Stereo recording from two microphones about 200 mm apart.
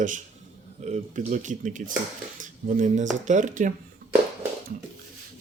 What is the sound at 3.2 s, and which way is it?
Speech, 40° right (ahead or behind).